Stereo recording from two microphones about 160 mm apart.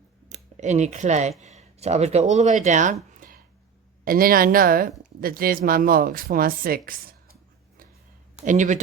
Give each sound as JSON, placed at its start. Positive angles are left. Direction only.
{"t": 0.3, "sound": "speech", "side_deg": -50}
{"t": 8.4, "sound": "speech", "side_deg": -50}